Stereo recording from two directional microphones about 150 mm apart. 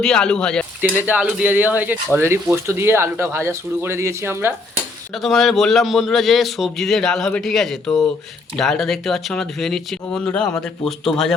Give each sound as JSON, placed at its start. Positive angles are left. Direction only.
{"t": 0.0, "sound": "a man's voice", "side_deg": 5}
{"t": 0.8, "sound": "speech", "side_deg": -10}
{"t": 5.1, "sound": "a man's voice", "side_deg": 0}